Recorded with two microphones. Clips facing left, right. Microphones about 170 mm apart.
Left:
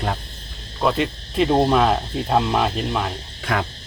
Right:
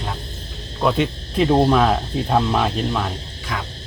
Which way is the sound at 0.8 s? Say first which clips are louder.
Right 1 dB; centre (ahead or behind).